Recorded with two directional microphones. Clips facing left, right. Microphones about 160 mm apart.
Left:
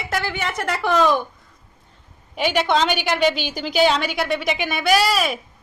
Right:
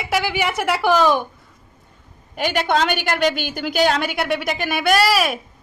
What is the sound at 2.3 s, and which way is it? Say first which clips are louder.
A woman's voice: even; 50° right (ahead or behind).